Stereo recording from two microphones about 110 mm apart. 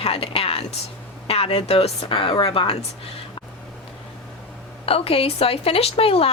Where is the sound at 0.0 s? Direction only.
60° left (ahead or behind).